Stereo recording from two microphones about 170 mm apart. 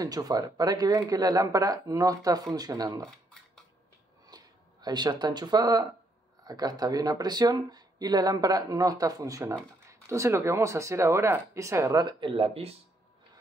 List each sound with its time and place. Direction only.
0.0 s speech: 20° right (ahead or behind)
4.3 s a sound: 25° right (ahead or behind)
4.8 s speech: 25° right (ahead or behind)